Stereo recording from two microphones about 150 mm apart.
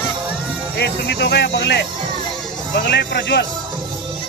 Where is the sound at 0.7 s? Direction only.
90° left.